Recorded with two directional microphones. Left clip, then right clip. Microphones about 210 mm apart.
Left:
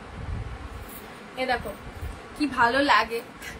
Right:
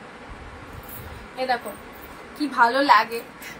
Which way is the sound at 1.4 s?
15° left (ahead or behind).